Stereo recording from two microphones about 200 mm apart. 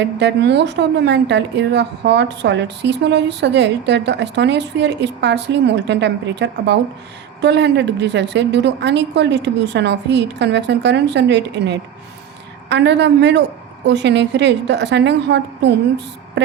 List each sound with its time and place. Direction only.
0.0 s a woman's voice: 60° right (ahead or behind)